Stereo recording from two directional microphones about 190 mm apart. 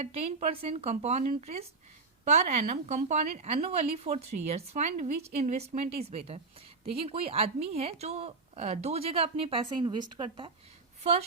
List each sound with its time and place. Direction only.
0.0 s a woman's voice: 35° right (ahead or behind)